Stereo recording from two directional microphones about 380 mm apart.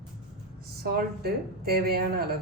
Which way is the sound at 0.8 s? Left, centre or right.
Right.